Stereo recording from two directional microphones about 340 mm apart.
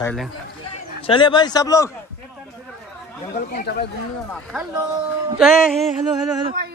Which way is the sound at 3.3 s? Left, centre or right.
Left.